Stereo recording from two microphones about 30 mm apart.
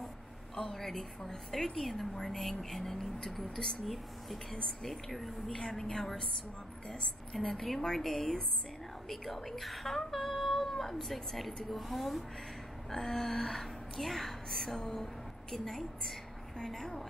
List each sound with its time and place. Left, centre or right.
0.7 s speech: centre
2.2 s speech: centre
5.5 s a woman's voice: left
7.3 s a woman's voice: centre
12.9 s speech: centre